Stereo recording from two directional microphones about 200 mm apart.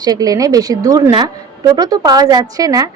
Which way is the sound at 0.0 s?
20° right (ahead or behind).